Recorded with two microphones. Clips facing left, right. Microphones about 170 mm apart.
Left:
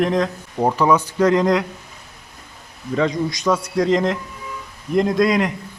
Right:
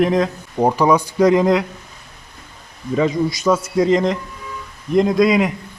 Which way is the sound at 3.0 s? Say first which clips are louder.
Right 2 dB; 5° right (ahead or behind).